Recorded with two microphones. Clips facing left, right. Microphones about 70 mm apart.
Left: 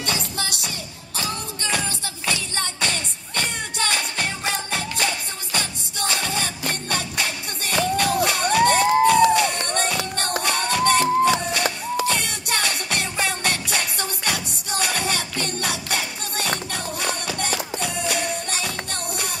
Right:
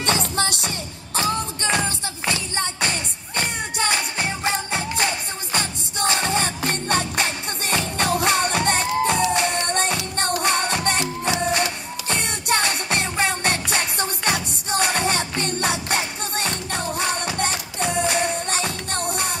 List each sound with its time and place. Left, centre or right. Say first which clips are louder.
0.0 s music: right 5 dB; right